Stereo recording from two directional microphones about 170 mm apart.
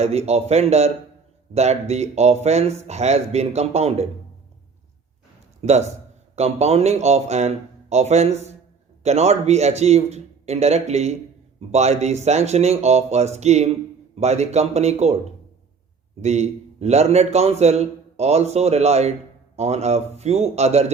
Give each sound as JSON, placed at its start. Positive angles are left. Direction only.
{"t": 0.0, "sound": "a man's voice", "side_deg": -40}
{"t": 5.6, "sound": "a man's voice", "side_deg": -40}
{"t": 16.2, "sound": "a man's voice", "side_deg": -40}